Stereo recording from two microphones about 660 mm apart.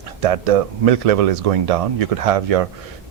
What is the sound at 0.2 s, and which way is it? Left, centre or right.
Speech, right.